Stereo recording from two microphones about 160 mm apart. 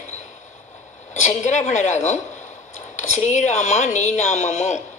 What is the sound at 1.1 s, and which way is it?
Speech, 50° left (ahead or behind).